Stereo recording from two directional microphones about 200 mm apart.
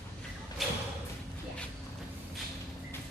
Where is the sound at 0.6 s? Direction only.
Centre (ahead or behind).